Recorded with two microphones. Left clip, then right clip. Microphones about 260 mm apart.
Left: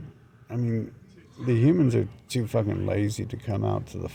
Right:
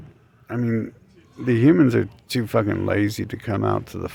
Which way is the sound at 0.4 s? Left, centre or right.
Right.